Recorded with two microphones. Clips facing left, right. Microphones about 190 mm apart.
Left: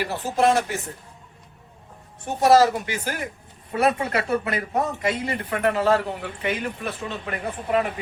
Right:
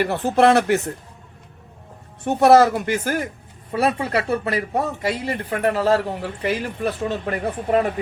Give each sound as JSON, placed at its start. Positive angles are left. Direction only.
{"t": 0.0, "sound": "speech", "side_deg": -60}
{"t": 2.2, "sound": "speech", "side_deg": -60}
{"t": 3.8, "sound": "speech", "side_deg": -35}